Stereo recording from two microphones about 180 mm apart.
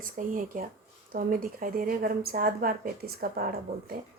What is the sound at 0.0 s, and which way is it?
A woman's voice, 50° right (ahead or behind).